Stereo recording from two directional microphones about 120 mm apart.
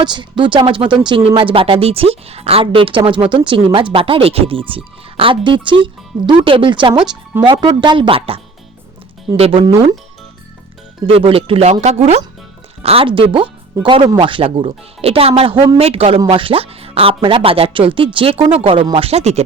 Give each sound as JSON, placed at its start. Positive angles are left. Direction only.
{"t": 0.0, "sound": "speech", "side_deg": -40}
{"t": 11.0, "sound": "speech", "side_deg": -50}
{"t": 12.8, "sound": "speech", "side_deg": -55}